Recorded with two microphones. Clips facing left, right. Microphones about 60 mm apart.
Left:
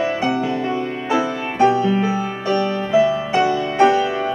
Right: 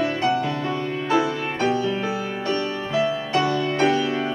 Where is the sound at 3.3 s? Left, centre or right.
Centre.